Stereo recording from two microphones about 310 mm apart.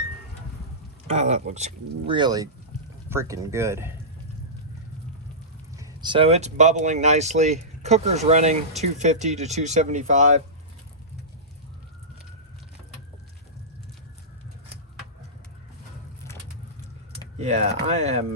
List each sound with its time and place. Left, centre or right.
1.1 s speech: right
5.7 s speech: centre
17.3 s speech: right